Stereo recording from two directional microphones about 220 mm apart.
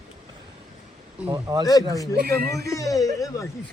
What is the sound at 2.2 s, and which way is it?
Speech, 45° right (ahead or behind).